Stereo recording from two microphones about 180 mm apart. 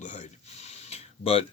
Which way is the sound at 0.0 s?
45° left (ahead or behind).